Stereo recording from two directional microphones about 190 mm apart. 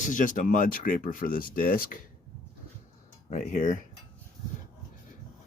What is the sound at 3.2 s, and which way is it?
Speech, 40° left (ahead or behind).